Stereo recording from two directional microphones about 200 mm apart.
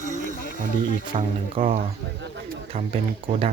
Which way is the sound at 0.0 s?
40° right (ahead or behind).